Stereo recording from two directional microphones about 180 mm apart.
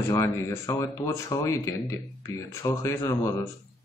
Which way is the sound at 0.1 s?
20° left (ahead or behind).